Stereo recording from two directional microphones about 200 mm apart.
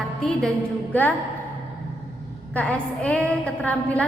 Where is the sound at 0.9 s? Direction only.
10° left (ahead or behind).